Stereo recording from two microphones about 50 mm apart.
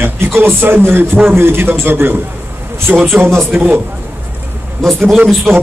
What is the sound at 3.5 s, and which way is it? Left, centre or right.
Speech, right.